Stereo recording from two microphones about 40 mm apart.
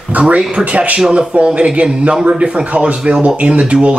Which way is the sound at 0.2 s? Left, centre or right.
Right.